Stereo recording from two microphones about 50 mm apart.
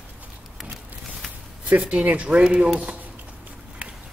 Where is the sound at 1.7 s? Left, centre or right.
Right.